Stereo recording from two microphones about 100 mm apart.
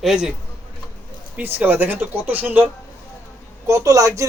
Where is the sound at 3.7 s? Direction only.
35° right (ahead or behind).